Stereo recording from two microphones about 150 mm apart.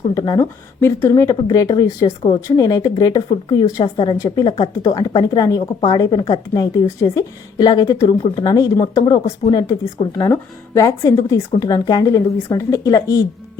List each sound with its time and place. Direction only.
0.1 s speech: 25° left (ahead or behind)